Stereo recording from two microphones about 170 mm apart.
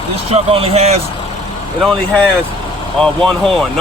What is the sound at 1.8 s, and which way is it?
Speech, 5° left (ahead or behind).